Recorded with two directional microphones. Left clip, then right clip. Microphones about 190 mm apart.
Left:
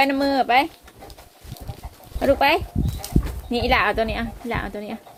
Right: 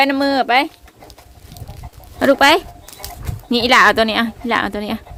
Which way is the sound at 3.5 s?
35° right (ahead or behind).